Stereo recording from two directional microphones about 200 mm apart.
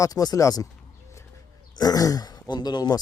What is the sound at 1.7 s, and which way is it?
Speech, 20° left (ahead or behind).